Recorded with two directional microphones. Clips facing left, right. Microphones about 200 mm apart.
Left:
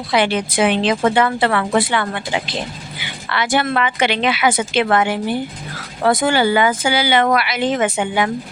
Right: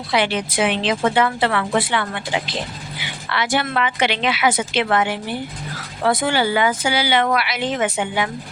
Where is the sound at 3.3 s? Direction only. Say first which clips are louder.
Left 3 dB; 50° left (ahead or behind).